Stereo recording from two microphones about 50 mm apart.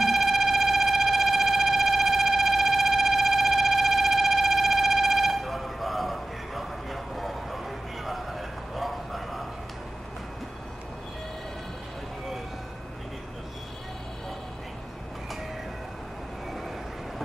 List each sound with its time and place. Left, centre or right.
0.0 s siren: centre